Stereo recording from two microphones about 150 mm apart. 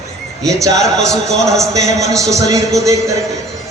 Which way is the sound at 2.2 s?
20° right (ahead or behind).